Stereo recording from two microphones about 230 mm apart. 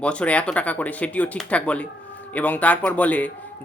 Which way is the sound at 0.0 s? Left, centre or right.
Centre.